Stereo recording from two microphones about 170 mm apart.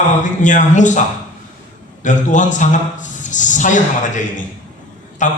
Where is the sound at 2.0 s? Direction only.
45° left (ahead or behind).